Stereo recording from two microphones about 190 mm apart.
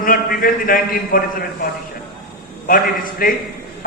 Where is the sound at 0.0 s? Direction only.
50° left (ahead or behind).